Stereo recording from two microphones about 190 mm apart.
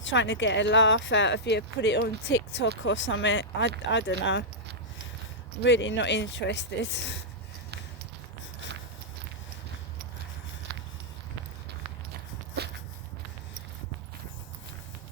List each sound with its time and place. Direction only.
0.0 s speech: 75° left (ahead or behind)
5.6 s speech: 75° left (ahead or behind)